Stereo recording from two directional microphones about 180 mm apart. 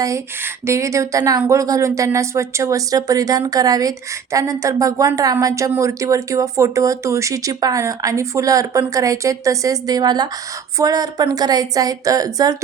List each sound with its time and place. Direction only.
0.7 s a woman's voice: 15° right (ahead or behind)